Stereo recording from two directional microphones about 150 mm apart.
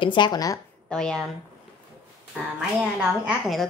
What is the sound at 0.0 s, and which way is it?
Speech, 30° left (ahead or behind).